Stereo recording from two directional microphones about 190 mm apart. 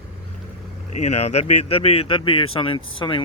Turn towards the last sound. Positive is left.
turn(degrees=25)  # may be behind; listen again after turning